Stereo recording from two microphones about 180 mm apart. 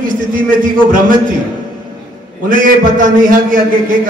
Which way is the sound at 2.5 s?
50° right (ahead or behind).